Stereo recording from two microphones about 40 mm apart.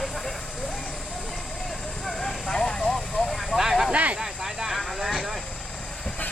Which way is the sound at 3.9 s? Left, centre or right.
Right.